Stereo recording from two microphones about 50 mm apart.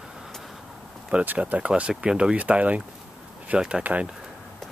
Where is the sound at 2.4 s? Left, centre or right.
Right.